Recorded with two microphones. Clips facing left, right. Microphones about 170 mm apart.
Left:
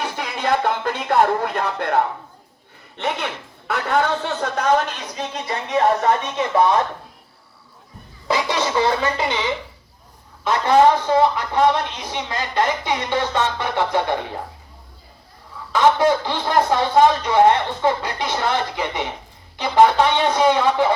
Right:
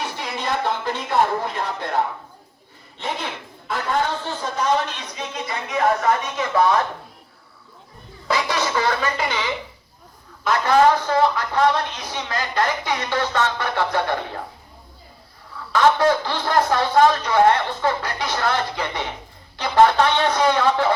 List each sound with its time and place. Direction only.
0.2 s music: 55° left (ahead or behind)
1.5 s speech: 60° left (ahead or behind)
3.0 s speech: 70° left (ahead or behind)
4.9 s speech: 35° left (ahead or behind)
8.3 s speech: 20° left (ahead or behind)
15.7 s a man's voice: 15° left (ahead or behind)